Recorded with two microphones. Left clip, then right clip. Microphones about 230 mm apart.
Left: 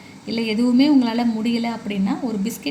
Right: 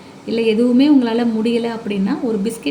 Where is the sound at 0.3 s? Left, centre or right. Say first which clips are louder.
Right 5 dB; left.